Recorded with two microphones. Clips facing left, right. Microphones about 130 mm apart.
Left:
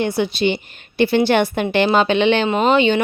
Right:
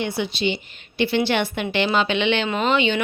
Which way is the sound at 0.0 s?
50° left (ahead or behind).